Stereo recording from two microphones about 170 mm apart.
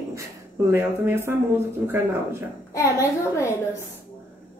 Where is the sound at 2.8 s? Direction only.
15° left (ahead or behind).